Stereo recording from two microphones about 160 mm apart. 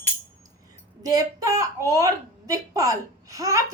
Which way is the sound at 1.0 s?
20° right (ahead or behind).